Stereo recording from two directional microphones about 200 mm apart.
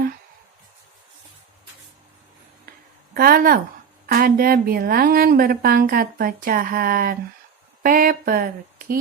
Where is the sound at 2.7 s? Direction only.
50° right (ahead or behind).